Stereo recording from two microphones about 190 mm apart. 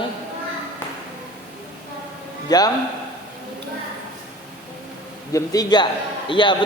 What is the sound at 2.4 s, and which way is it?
Speech, 20° left (ahead or behind).